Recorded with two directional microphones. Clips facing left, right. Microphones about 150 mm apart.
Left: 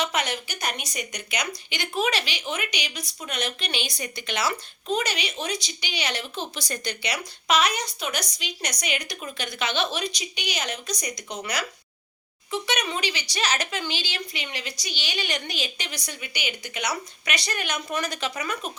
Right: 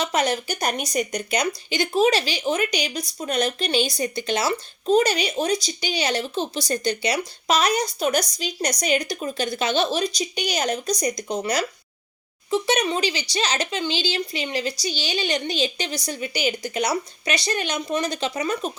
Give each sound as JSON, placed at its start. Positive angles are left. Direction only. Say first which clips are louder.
{"t": 0.0, "sound": "speech", "louder": "right 5 dB", "side_deg": -35}